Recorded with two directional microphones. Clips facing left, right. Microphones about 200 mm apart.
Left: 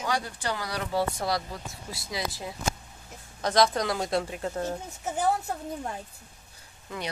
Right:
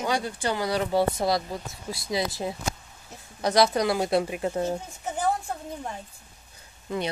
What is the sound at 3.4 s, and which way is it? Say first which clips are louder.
Speech: right 2 dB; 10° right (ahead or behind).